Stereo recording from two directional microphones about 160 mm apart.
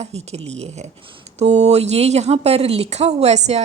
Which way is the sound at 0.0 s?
40° right (ahead or behind).